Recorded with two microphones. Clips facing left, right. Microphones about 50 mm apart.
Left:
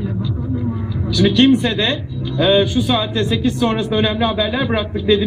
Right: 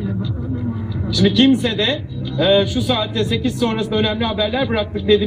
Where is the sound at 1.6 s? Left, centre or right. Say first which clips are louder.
Left 1 dB; centre.